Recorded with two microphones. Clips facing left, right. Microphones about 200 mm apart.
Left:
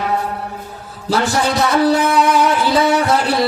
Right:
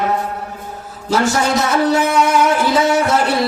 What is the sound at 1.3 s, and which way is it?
Speech, 35° left (ahead or behind).